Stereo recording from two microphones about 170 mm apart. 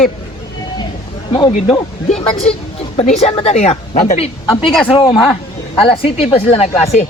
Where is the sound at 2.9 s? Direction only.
40° left (ahead or behind).